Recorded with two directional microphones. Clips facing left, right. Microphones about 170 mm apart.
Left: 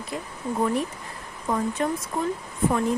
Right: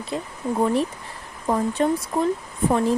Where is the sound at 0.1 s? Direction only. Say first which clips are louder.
Right 4 dB; 30° right (ahead or behind).